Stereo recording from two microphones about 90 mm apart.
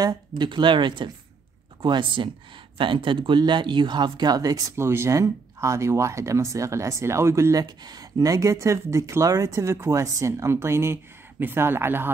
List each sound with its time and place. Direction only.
0.0 s speech: 50° right (ahead or behind)
4.7 s speech: 30° right (ahead or behind)
7.6 s speech: 50° right (ahead or behind); by 12.1 s 25° right (ahead or behind)